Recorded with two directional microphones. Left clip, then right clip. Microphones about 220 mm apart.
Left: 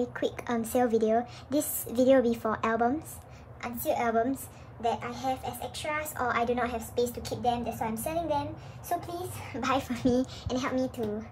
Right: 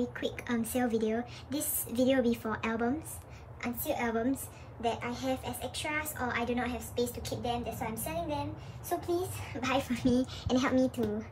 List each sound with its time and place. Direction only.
0.0 s a woman's voice: 10° left (ahead or behind)
9.6 s a woman's voice: 10° left (ahead or behind)